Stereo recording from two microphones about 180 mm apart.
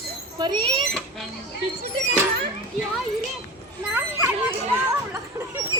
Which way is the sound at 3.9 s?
10° right (ahead or behind).